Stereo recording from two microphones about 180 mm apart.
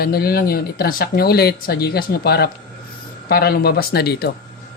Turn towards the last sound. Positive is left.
turn(degrees=65)  # may be behind; listen again after turning